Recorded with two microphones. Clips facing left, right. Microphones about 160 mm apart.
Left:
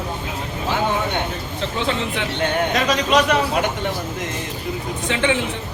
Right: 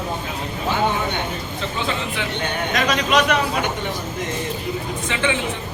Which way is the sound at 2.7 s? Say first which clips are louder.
Right 1 dB; 30° left (ahead or behind).